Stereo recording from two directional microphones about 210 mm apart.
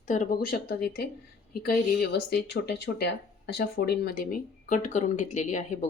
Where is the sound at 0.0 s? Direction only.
35° left (ahead or behind).